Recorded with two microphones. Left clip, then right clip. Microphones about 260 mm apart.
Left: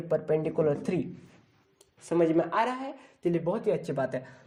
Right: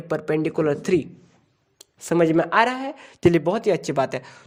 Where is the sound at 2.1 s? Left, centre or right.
Right.